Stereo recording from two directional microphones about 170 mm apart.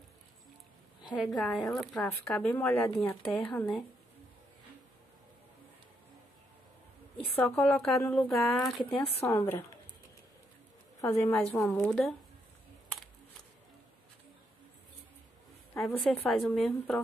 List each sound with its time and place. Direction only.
1.1 s a woman's voice: centre (ahead or behind)
2.2 s speech: 15° left (ahead or behind)
7.3 s a woman's voice: 15° left (ahead or behind)
8.9 s speech: 35° left (ahead or behind)
9.2 s speech: 15° left (ahead or behind)
11.0 s speech: 15° left (ahead or behind)
15.8 s a woman's voice: 10° left (ahead or behind)